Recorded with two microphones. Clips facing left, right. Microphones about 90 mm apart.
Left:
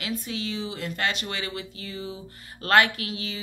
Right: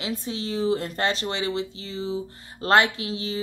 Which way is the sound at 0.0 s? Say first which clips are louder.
Right 1 dB; 30° right (ahead or behind).